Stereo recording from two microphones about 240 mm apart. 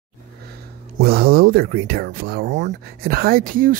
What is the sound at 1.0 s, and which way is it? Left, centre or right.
Speech, right.